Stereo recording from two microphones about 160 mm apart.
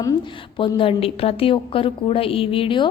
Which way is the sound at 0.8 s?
35° left (ahead or behind).